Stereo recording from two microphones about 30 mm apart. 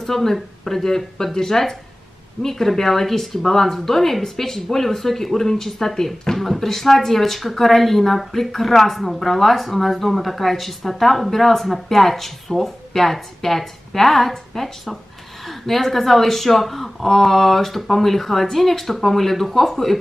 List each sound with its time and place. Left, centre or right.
0.0 s speech: centre